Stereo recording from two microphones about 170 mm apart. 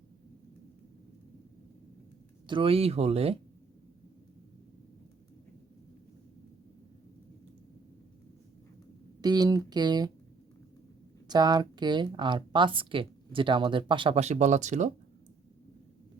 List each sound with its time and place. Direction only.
2.5 s speech: 30° right (ahead or behind)
9.2 s speech: 25° right (ahead or behind)
11.3 s speech: 25° right (ahead or behind); by 14.9 s 45° right (ahead or behind)